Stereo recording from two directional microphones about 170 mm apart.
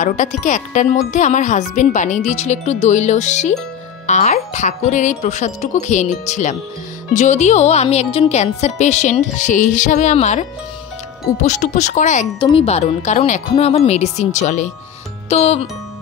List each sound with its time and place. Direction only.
0.0 s speech: 50° left (ahead or behind)
11.4 s speech: 45° left (ahead or behind)
12.4 s speech: 30° left (ahead or behind)